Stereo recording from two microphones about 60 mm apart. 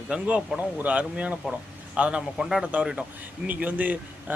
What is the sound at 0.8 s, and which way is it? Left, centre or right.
A man's voice, right.